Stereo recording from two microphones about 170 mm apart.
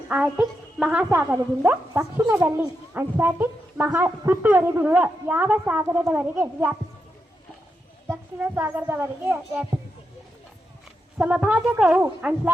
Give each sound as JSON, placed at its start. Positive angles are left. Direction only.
{"t": 0.1, "sound": "speech", "side_deg": -10}
{"t": 8.0, "sound": "speech", "side_deg": -15}
{"t": 11.2, "sound": "speech", "side_deg": -5}